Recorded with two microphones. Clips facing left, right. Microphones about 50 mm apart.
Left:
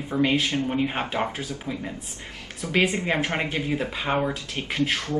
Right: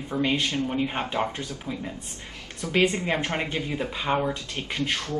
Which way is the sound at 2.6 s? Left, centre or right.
Left.